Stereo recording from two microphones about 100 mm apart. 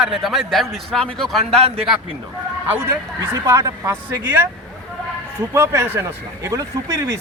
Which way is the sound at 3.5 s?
30° right (ahead or behind).